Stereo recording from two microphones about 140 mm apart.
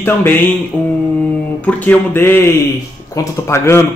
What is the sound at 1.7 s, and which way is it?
A man's voice, 10° left (ahead or behind).